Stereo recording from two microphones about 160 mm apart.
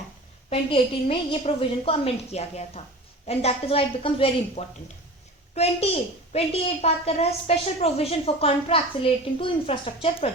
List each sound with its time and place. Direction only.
0.5 s a woman's voice: 40° left (ahead or behind)